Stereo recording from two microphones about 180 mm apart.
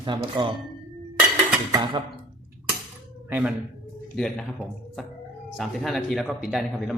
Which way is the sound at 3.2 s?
10° right (ahead or behind).